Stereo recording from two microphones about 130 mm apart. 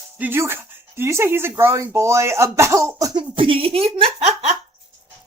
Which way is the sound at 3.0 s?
35° right (ahead or behind).